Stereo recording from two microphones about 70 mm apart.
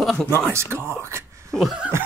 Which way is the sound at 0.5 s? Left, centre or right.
Right.